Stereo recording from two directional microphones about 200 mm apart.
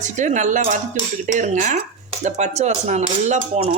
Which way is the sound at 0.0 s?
40° right (ahead or behind).